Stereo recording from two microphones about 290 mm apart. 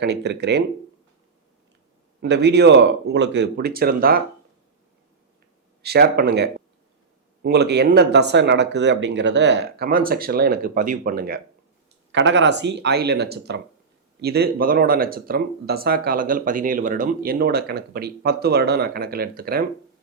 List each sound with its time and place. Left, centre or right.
0.0 s speech: right
2.2 s speech: right
5.8 s speech: right